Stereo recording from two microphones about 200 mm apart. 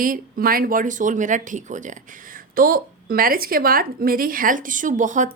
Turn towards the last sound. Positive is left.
turn(degrees=-40)  # may be behind; listen again after turning